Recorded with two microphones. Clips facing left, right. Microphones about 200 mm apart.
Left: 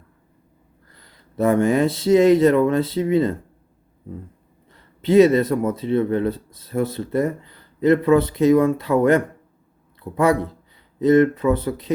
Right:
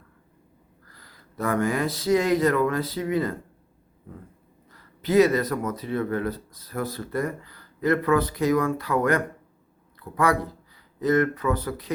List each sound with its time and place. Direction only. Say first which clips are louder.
0.9 s speech: left 1 dB; 25° left (ahead or behind)
4.7 s speech: left 5 dB; 25° left (ahead or behind)